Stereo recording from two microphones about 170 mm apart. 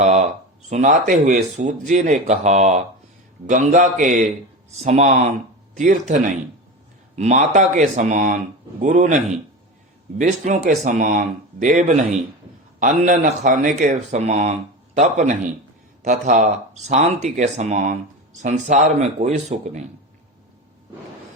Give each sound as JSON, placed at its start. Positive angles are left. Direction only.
{"t": 0.7, "sound": "speech", "side_deg": -45}